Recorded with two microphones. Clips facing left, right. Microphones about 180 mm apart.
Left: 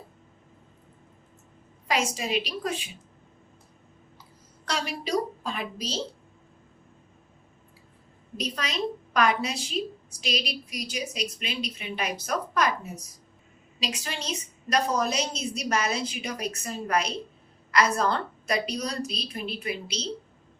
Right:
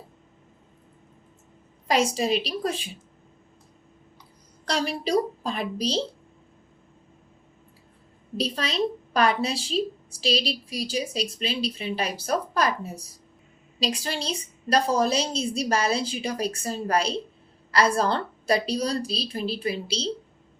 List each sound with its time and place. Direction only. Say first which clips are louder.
1.9 s a woman's voice: right 5 dB; 35° right (ahead or behind)
4.6 s a woman's voice: right 5 dB; 35° right (ahead or behind)
8.4 s a woman's voice: right 4 dB; 30° right (ahead or behind)